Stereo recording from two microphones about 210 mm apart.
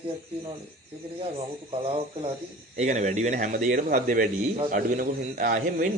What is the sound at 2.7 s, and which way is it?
A man's voice, 35° right (ahead or behind).